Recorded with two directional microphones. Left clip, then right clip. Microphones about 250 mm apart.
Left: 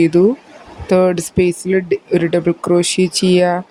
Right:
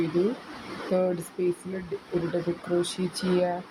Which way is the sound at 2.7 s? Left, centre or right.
Left.